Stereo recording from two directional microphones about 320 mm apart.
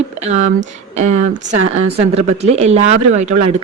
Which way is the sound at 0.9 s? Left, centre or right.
Right.